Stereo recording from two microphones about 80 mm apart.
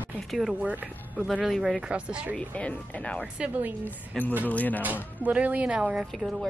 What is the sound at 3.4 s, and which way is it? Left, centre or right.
Speech, centre.